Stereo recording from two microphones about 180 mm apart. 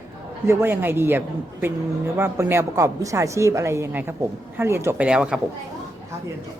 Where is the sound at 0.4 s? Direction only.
10° right (ahead or behind).